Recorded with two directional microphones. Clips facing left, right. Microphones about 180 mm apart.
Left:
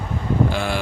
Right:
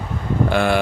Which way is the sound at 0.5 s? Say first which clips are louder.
Right 6 dB; 60° right (ahead or behind).